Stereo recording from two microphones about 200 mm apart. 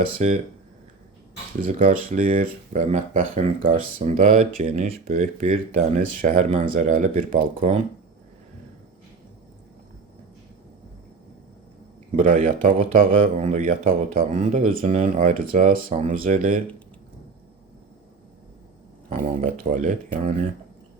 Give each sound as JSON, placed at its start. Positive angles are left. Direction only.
{"t": 0.2, "sound": "speech", "side_deg": -35}
{"t": 1.6, "sound": "speech", "side_deg": -40}
{"t": 4.6, "sound": "speech", "side_deg": -35}
{"t": 12.1, "sound": "speech", "side_deg": -40}
{"t": 14.3, "sound": "speech", "side_deg": -30}
{"t": 14.7, "sound": "speech", "side_deg": -45}
{"t": 19.1, "sound": "speech", "side_deg": -40}